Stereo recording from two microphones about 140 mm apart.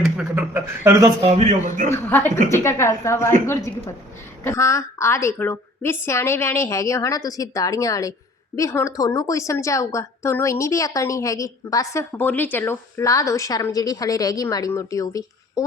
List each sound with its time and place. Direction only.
0.0 s speech: 10° right (ahead or behind)
1.2 s a man's voice: 50° right (ahead or behind)
1.9 s a woman's voice: 20° left (ahead or behind)
12.1 s a woman's voice: 10° left (ahead or behind)